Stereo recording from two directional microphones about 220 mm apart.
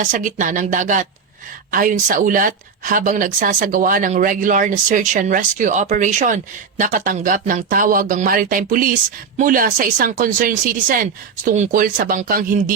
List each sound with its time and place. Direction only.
0.0 s speech: 35° right (ahead or behind)